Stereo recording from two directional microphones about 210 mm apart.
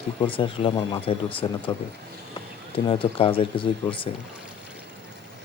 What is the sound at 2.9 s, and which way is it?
Speech, 25° left (ahead or behind).